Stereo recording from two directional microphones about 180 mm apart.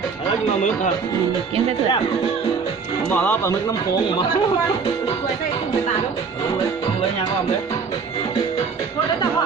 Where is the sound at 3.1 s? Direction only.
10° left (ahead or behind).